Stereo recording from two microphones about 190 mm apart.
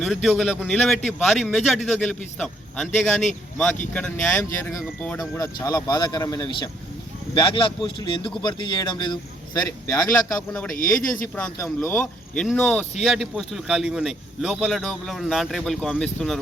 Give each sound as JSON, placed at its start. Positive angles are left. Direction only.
{"t": 0.0, "sound": "speech", "side_deg": 0}
{"t": 5.4, "sound": "speech", "side_deg": 20}
{"t": 10.8, "sound": "speech", "side_deg": 5}